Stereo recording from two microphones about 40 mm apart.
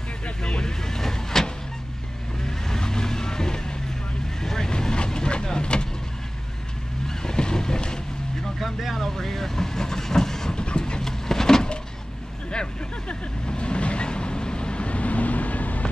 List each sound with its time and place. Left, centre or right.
0.4 s vehicle: centre
7.1 s vehicle: centre
8.5 s vehicle: centre
10.6 s vehicle: left
11.0 s a sound: centre
13.1 s vehicle: left